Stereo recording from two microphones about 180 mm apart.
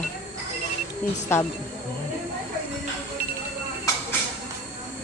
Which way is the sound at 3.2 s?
55° right (ahead or behind).